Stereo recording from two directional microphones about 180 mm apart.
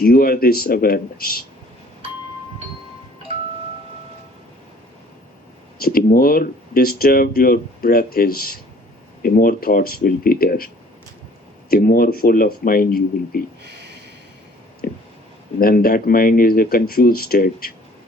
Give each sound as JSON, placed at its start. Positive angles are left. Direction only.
{"t": 0.0, "sound": "speech", "side_deg": 55}
{"t": 5.8, "sound": "speech", "side_deg": 55}
{"t": 11.7, "sound": "speech", "side_deg": 55}
{"t": 14.8, "sound": "a sound", "side_deg": 50}
{"t": 15.5, "sound": "speech", "side_deg": 55}